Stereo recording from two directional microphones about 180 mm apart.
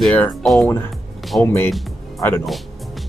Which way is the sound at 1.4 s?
10° left (ahead or behind).